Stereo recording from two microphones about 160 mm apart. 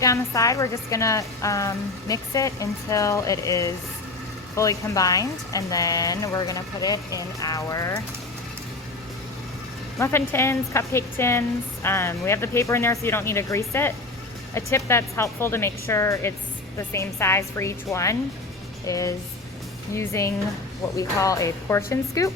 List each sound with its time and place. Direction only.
0.0 s a woman's voice: 20° left (ahead or behind)
10.0 s a woman's voice: 15° left (ahead or behind)